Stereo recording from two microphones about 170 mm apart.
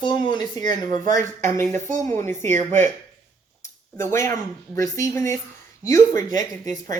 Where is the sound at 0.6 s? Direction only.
50° right (ahead or behind).